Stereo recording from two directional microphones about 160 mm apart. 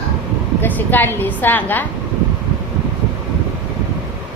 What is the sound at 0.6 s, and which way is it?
A woman's voice, 10° left (ahead or behind).